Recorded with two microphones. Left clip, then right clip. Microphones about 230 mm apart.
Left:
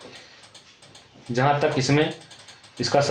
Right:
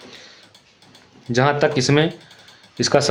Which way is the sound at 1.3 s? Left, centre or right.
Right.